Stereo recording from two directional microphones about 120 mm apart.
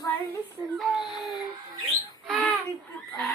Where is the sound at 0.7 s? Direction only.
Centre (ahead or behind).